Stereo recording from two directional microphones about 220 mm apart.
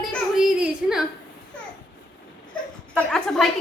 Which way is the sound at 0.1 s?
5° right (ahead or behind).